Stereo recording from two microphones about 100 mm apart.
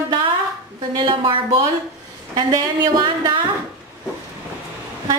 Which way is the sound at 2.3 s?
40° right (ahead or behind).